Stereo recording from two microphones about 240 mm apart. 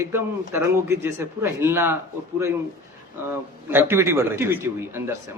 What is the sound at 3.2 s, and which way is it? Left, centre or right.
Speech, centre.